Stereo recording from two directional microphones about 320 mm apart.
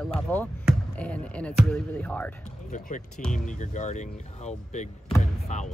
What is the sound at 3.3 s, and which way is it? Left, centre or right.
Speech, left.